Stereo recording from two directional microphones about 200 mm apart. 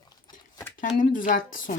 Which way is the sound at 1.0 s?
40° left (ahead or behind).